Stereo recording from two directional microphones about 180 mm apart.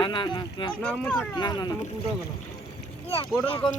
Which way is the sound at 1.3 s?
25° left (ahead or behind).